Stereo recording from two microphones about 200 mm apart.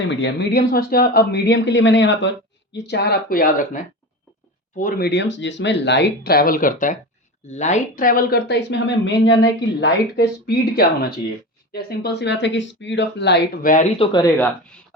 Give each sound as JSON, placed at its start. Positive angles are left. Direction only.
{"t": 0.1, "sound": "speech", "side_deg": 65}
{"t": 4.8, "sound": "speech", "side_deg": 45}
{"t": 14.0, "sound": "speech", "side_deg": 20}
{"t": 14.3, "sound": "speech", "side_deg": 10}